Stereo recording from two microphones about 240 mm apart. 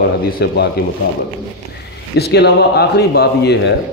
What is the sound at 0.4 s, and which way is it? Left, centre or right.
Speech, left.